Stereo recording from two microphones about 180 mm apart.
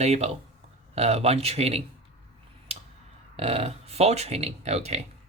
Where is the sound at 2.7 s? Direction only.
35° right (ahead or behind).